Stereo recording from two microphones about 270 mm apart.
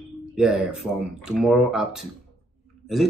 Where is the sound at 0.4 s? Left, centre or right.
Centre.